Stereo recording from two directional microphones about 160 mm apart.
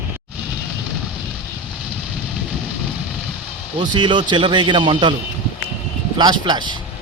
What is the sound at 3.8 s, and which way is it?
Speech, 30° right (ahead or behind).